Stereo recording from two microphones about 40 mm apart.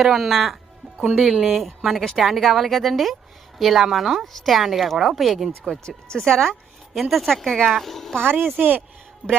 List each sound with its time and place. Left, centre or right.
0.0 s speech: centre
6.1 s speech: centre
6.9 s speech: centre
8.2 s speech: right
8.5 s speech: right